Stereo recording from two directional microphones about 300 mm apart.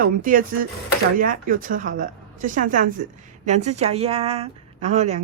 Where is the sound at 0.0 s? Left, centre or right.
Right.